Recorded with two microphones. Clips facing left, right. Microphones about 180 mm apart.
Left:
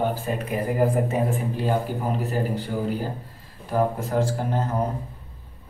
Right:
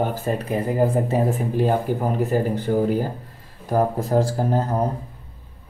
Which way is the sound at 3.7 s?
40° right (ahead or behind).